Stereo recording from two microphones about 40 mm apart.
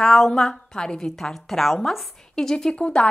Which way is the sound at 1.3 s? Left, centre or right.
Centre.